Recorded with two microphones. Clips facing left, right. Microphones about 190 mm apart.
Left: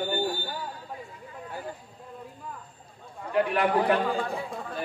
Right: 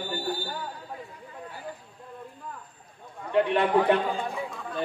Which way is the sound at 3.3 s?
25° right (ahead or behind).